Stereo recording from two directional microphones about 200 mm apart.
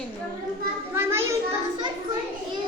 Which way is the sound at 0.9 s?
10° right (ahead or behind).